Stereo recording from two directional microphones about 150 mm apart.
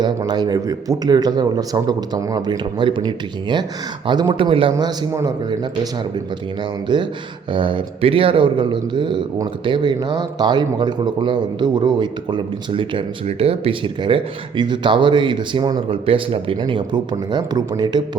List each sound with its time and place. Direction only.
0.0 s speech: 30° right (ahead or behind)
4.7 s speech: 20° right (ahead or behind)